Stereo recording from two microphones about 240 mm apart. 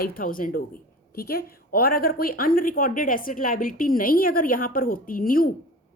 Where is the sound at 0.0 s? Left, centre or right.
Left.